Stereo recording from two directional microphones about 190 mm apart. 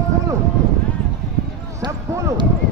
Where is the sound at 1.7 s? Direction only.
20° right (ahead or behind).